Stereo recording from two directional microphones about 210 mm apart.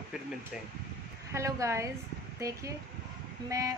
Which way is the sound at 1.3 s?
15° right (ahead or behind).